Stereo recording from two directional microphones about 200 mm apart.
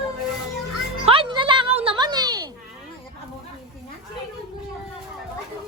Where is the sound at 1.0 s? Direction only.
25° right (ahead or behind).